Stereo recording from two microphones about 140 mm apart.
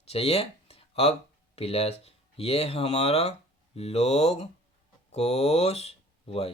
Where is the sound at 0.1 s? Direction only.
45° left (ahead or behind).